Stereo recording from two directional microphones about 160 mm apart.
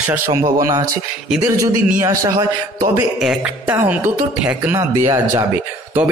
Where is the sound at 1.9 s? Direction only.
20° right (ahead or behind).